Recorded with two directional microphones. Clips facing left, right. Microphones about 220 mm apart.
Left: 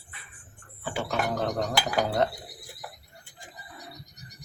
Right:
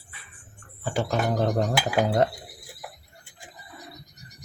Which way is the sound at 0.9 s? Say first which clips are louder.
Right 4 dB; 35° right (ahead or behind).